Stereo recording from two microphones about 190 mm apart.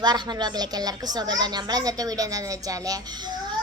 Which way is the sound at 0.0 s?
20° right (ahead or behind).